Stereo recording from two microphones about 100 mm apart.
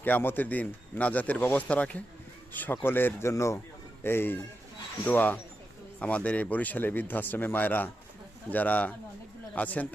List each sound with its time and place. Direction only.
0.0 s speech: 20° left (ahead or behind)